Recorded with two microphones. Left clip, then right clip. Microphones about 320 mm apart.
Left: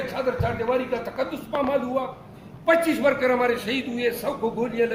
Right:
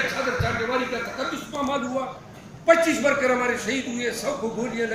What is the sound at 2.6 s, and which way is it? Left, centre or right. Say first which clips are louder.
A man's voice: right 1 dB; centre.